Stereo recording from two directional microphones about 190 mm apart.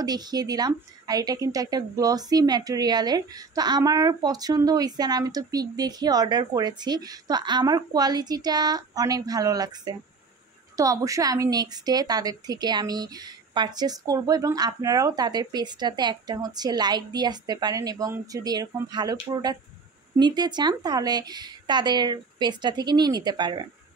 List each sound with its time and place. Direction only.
0.0 s a woman's voice: 20° right (ahead or behind)